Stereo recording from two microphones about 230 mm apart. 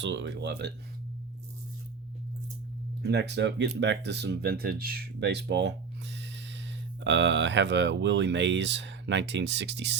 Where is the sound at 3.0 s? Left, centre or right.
Right.